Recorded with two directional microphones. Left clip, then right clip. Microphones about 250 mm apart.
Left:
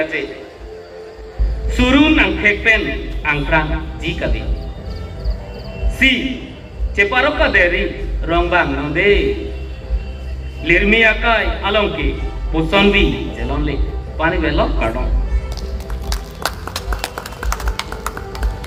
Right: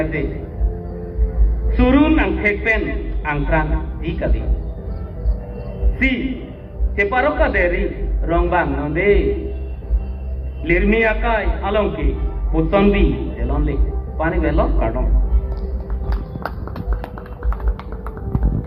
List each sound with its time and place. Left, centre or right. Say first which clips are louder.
0.0 s a man's voice: left 2 dB; left
1.7 s a man's voice: left 2 dB; left
6.0 s a man's voice: left 6 dB; left
10.6 s a man's voice: left 4 dB; left
17.5 s music: left 10 dB; left